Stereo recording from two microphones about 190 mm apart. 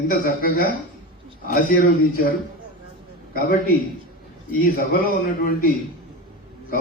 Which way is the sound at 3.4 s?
50° left (ahead or behind).